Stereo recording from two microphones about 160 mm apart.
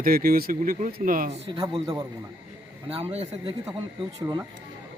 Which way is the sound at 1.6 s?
30° right (ahead or behind).